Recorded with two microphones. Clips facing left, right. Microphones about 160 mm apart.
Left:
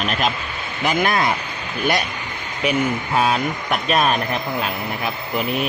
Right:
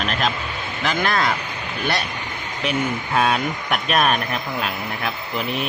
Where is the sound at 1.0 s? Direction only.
20° left (ahead or behind).